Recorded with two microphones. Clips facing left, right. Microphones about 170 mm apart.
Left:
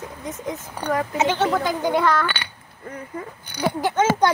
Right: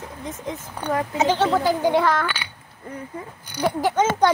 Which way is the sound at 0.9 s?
30° right (ahead or behind).